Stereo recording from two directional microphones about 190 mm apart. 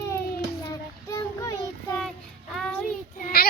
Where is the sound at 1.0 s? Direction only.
15° left (ahead or behind).